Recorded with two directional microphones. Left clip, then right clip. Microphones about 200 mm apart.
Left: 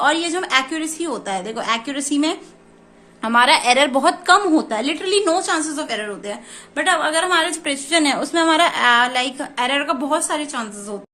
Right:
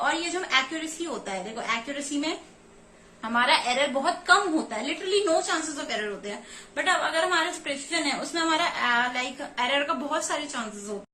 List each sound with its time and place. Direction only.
0.0 s a woman's voice: 55° left (ahead or behind)